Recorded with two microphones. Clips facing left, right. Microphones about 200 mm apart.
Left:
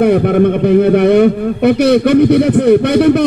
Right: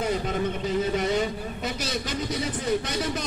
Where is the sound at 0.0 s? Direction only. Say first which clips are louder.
Left 17 dB; 65° left (ahead or behind).